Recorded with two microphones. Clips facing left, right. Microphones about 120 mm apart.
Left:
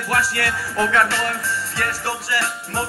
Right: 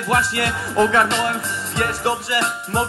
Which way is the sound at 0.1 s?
20° right (ahead or behind).